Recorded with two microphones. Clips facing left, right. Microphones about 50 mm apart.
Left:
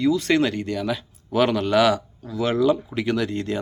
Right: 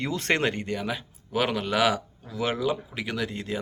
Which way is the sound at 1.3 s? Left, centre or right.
Centre.